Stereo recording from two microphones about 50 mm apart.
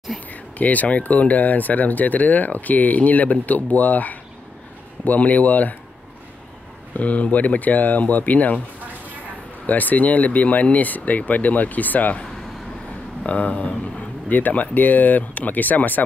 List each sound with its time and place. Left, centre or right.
0.3 s speech: left
7.0 s speech: left
9.7 s speech: left